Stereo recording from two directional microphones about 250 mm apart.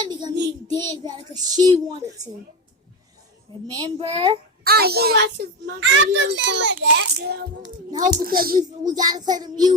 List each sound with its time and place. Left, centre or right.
0.0 s child singing: centre
0.7 s a child's voice: centre
3.7 s a child's voice: centre
4.6 s a child's voice: right
7.9 s a child's voice: centre
8.2 s a child's voice: right
8.5 s a child's voice: centre